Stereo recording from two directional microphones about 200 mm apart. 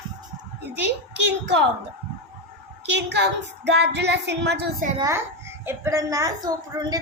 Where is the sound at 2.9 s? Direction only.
60° right (ahead or behind).